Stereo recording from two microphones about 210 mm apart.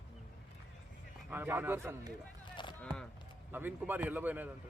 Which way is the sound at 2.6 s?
20° left (ahead or behind).